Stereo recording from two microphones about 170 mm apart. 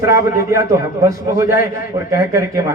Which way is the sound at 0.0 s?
15° right (ahead or behind).